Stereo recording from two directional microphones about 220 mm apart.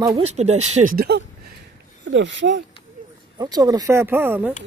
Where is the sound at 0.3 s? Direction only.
30° right (ahead or behind); by 1.2 s 45° right (ahead or behind).